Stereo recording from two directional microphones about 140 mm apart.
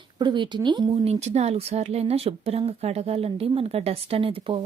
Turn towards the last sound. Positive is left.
turn(degrees=-40)  # may be behind; listen again after turning